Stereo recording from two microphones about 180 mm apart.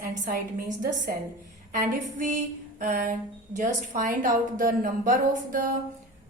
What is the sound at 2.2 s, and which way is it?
Female singing, 45° right (ahead or behind).